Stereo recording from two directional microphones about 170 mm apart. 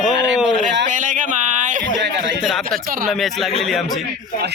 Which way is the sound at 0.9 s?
50° right (ahead or behind).